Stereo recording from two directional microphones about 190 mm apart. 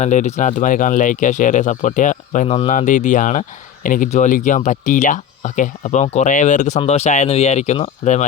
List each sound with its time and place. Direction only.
0.0 s speech: 40° left (ahead or behind)